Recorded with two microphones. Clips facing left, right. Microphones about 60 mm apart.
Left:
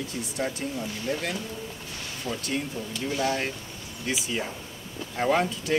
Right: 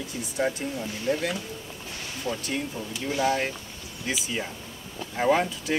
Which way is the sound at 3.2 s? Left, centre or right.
Centre.